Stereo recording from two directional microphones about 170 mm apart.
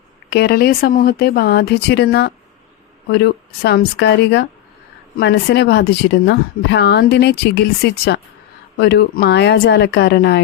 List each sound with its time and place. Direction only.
0.3 s speech: 70° left (ahead or behind)